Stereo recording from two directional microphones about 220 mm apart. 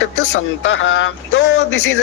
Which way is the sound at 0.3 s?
60° left (ahead or behind).